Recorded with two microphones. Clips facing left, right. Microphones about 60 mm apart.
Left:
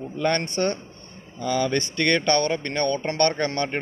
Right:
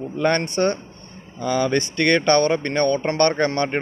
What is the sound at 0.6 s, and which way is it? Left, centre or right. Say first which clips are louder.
A man's voice: right 4 dB; right.